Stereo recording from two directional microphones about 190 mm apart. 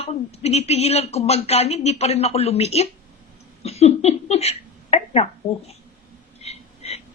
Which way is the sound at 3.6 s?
35° left (ahead or behind).